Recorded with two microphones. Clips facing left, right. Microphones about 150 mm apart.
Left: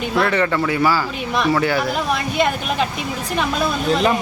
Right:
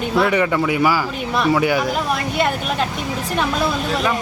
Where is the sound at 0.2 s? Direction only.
10° right (ahead or behind).